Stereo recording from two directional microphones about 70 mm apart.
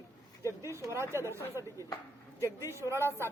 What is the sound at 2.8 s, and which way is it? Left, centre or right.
Speech, right.